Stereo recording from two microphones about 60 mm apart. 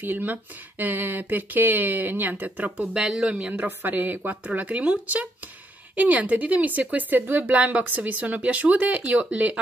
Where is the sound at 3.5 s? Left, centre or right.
Right.